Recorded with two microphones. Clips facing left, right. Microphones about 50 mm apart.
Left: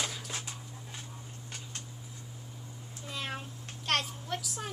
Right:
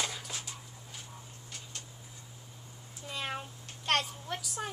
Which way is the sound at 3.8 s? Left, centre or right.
Centre.